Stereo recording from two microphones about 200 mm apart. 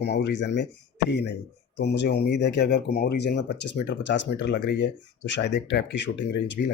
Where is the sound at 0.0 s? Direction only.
55° left (ahead or behind).